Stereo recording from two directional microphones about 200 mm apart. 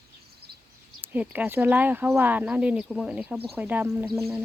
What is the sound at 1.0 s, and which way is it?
Speech, 10° right (ahead or behind).